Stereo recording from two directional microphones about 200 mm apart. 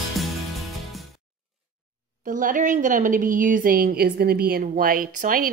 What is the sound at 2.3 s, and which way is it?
A woman's voice, 40° right (ahead or behind).